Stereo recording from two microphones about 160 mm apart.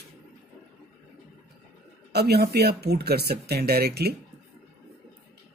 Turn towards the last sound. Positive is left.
turn(degrees=-85)